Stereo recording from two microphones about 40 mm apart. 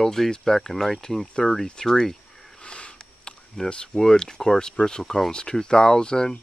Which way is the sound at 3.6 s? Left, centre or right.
Left.